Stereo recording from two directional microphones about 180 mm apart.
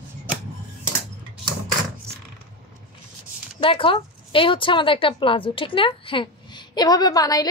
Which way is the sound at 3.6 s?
30° left (ahead or behind).